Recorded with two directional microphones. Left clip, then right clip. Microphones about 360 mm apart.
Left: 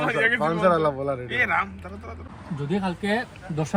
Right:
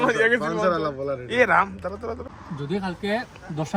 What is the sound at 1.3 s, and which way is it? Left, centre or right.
Speech, right.